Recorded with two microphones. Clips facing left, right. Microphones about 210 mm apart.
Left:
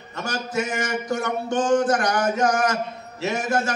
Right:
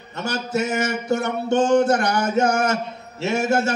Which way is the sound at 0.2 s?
25° right (ahead or behind).